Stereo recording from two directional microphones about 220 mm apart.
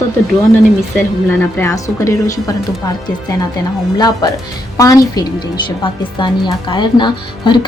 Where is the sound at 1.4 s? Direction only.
10° left (ahead or behind).